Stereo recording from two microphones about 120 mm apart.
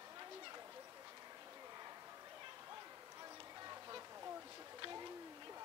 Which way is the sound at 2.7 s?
30° right (ahead or behind).